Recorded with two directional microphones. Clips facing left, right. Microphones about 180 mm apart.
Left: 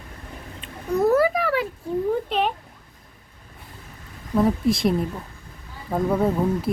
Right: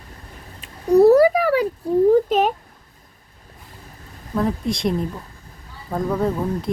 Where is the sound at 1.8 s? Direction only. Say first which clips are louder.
Right 11 dB; 35° right (ahead or behind).